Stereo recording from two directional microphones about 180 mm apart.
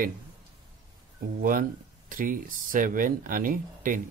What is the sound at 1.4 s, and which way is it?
Speech, 50° right (ahead or behind).